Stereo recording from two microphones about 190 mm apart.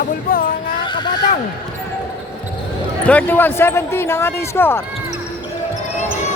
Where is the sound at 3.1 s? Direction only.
10° left (ahead or behind).